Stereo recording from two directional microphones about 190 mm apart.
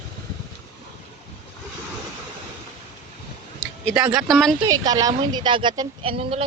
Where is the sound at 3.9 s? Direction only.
5° right (ahead or behind).